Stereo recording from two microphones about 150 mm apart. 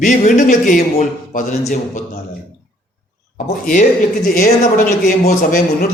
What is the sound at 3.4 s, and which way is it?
A man's voice, 55° left (ahead or behind).